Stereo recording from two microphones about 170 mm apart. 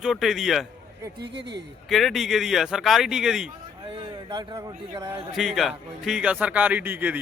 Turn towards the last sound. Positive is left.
turn(degrees=-10)  # may be behind; listen again after turning